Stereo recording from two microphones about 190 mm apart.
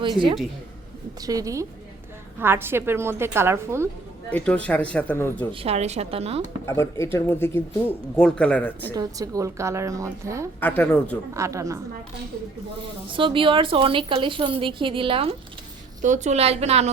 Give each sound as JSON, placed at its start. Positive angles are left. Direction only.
{"t": 1.2, "sound": "a woman's voice", "side_deg": -20}
{"t": 4.3, "sound": "speech", "side_deg": 5}
{"t": 5.5, "sound": "a woman's voice", "side_deg": -30}
{"t": 6.7, "sound": "speech", "side_deg": 15}
{"t": 9.0, "sound": "a woman's voice", "side_deg": -20}
{"t": 10.6, "sound": "speech", "side_deg": 10}
{"t": 11.3, "sound": "a woman's voice", "side_deg": -15}
{"t": 12.8, "sound": "speech", "side_deg": -25}
{"t": 16.0, "sound": "a woman's voice", "side_deg": -40}